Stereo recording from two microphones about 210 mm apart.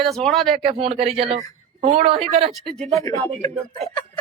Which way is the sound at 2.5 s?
Centre (ahead or behind).